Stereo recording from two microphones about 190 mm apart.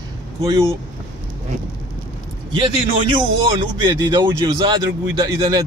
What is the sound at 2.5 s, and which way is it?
A man's voice, 25° right (ahead or behind).